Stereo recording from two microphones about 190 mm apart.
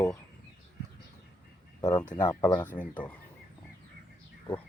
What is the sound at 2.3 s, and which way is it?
Speech, 15° left (ahead or behind).